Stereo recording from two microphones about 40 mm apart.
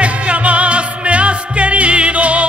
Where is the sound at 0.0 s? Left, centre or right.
Right.